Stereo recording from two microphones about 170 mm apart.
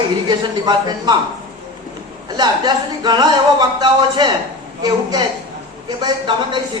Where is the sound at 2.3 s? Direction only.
25° right (ahead or behind).